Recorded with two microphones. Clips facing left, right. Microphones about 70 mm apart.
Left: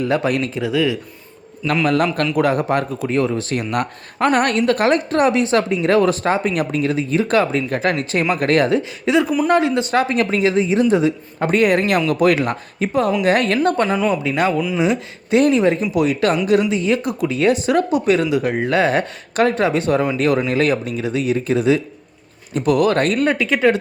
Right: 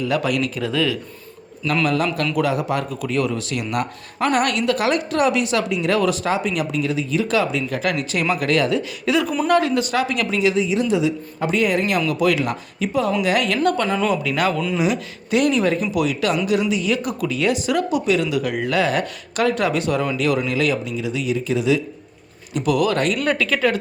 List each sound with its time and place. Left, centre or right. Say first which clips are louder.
0.1 s speech: left 2 dB; left
0.6 s speech: left 3 dB; centre
2.3 s speech: left 4 dB; left
3.0 s speech: left 3 dB; left
8.8 s speech: left 3 dB; left
9.9 s speech: left 4 dB; left
23.2 s speech: left 4 dB; left